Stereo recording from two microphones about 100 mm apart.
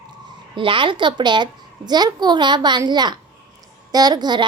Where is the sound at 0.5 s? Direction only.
55° right (ahead or behind).